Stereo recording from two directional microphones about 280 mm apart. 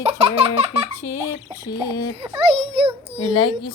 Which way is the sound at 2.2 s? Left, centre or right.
Centre.